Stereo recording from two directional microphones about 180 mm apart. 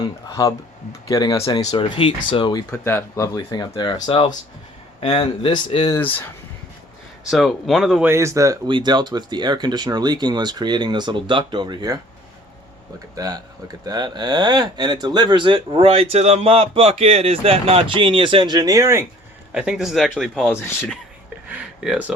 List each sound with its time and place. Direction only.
0.0 s speech: 20° left (ahead or behind)
2.6 s speech: 10° left (ahead or behind); by 6.0 s 30° left (ahead or behind)
6.0 s speech: 10° left (ahead or behind)
7.3 s speech: centre (ahead or behind)
8.1 s speech: 15° right (ahead or behind)
13.1 s speech: 20° right (ahead or behind)
19.5 s speech: 5° right (ahead or behind)
20.5 s speech: 15° left (ahead or behind)
21.5 s a sound: 10° right (ahead or behind)